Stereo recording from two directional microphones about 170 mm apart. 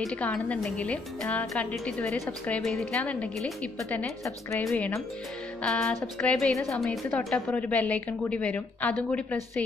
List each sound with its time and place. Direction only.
0.0 s a woman's voice: 5° left (ahead or behind)
4.2 s a woman's voice: 20° left (ahead or behind)
5.6 s music: 5° left (ahead or behind)
7.1 s a woman's voice: 5° left (ahead or behind)